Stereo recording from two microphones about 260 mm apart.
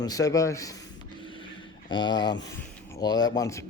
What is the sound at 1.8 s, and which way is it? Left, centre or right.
Speech, centre.